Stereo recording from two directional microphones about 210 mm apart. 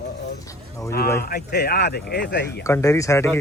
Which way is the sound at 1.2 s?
50° left (ahead or behind).